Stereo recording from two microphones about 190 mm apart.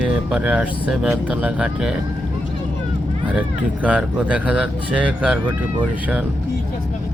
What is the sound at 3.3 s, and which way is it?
Speech, 5° right (ahead or behind).